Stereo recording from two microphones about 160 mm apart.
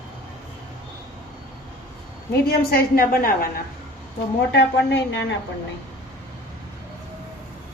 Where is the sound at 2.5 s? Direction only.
70° left (ahead or behind).